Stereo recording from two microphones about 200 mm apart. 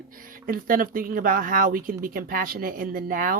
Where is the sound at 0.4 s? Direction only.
45° right (ahead or behind).